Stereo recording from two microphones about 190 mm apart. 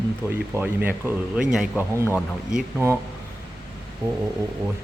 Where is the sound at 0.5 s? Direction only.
10° right (ahead or behind).